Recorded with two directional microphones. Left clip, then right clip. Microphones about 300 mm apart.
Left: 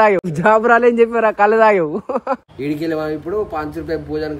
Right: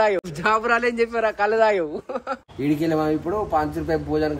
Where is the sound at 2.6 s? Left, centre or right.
Centre.